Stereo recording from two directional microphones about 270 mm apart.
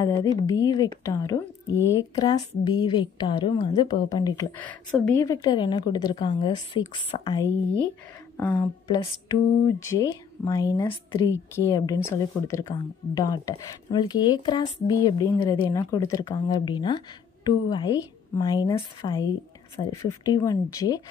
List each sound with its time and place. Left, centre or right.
0.0 s a woman's voice: centre